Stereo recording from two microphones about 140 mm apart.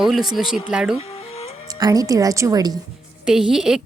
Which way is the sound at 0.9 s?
45° left (ahead or behind).